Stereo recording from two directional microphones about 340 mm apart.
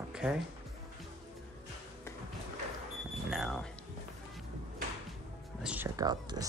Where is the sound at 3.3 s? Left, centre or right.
Centre.